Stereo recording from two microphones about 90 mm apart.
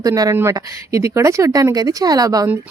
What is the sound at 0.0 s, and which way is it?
A woman's voice, 40° right (ahead or behind).